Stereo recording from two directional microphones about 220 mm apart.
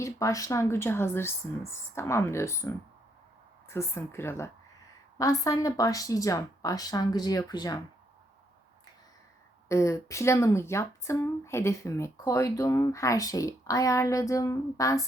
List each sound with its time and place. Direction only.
0.0 s a woman's voice: 15° left (ahead or behind)
9.6 s a woman's voice: 15° left (ahead or behind)